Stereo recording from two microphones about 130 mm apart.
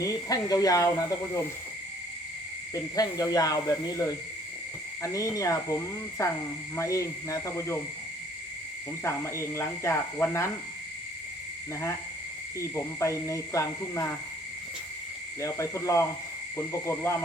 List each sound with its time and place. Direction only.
0.0 s speech: 30° left (ahead or behind)
2.7 s speech: 25° left (ahead or behind)
9.0 s speech: 20° left (ahead or behind)
12.5 s speech: 20° left (ahead or behind)
15.4 s speech: 25° left (ahead or behind)